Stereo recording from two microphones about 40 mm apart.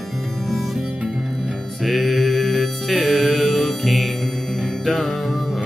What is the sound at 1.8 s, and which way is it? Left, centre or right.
Music, centre.